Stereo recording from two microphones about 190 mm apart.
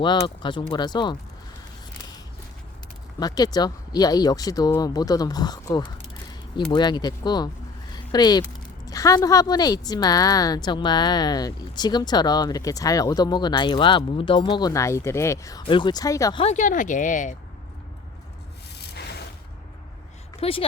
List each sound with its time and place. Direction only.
0.0 s a woman's voice: 25° left (ahead or behind)
3.2 s a woman's voice: 20° left (ahead or behind)
16.4 s speech: 40° left (ahead or behind)
20.4 s a woman's voice: 30° left (ahead or behind)